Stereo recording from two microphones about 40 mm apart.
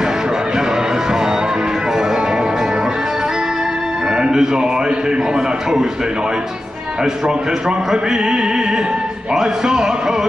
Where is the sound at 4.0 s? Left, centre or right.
Centre.